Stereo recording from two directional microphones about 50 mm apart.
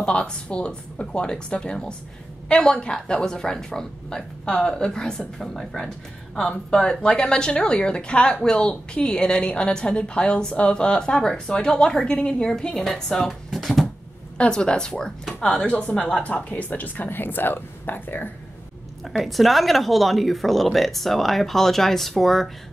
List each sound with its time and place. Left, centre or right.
0.0 s a woman's voice: left; by 13.8 s centre
14.4 s a woman's voice: centre; by 18.3 s left
19.0 s a woman's voice: centre